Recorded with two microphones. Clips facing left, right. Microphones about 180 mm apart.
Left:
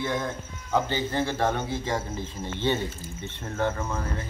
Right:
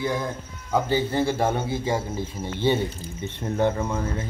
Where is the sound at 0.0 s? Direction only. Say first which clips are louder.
Right 2 dB; 5° right (ahead or behind).